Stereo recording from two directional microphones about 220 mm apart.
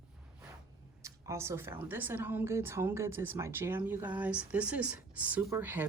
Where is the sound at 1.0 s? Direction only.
10° right (ahead or behind).